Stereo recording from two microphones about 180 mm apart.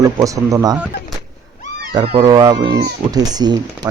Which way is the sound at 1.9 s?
30° right (ahead or behind).